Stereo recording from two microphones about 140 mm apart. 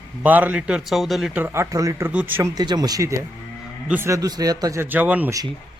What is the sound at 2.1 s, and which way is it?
Speech, 10° right (ahead or behind).